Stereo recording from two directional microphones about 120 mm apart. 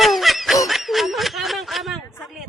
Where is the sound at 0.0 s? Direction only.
Centre (ahead or behind).